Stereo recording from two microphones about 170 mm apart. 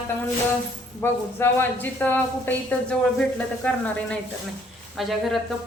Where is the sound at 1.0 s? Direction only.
15° left (ahead or behind).